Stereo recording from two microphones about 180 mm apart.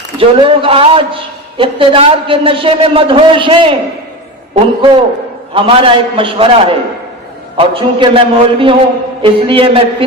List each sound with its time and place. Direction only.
0.2 s a man's voice: 30° right (ahead or behind)